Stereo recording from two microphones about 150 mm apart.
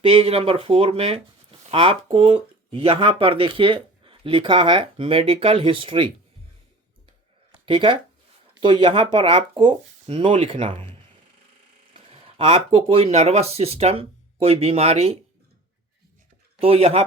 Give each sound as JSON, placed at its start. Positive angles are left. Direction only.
{"t": 0.0, "sound": "speech", "side_deg": -40}
{"t": 7.6, "sound": "speech", "side_deg": -35}
{"t": 12.7, "sound": "speech", "side_deg": -40}
{"t": 16.6, "sound": "speech", "side_deg": -40}